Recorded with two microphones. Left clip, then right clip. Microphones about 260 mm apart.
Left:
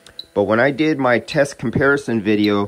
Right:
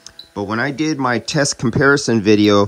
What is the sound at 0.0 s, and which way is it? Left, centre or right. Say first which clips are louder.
Speech: left 7 dB; centre.